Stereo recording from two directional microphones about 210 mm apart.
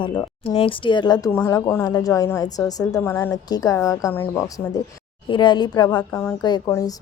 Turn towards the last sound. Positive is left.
turn(degrees=15)  # may be behind; listen again after turning